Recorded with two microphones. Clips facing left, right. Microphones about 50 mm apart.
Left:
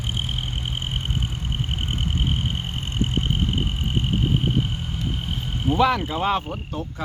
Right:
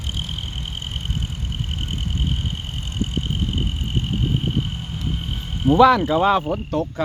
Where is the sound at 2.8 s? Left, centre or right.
Left.